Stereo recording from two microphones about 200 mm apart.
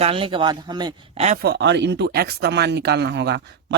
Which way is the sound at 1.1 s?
35° right (ahead or behind).